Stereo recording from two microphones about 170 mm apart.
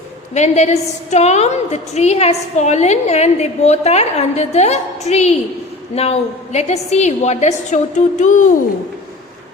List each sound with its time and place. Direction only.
0.3 s a woman's voice: 40° left (ahead or behind)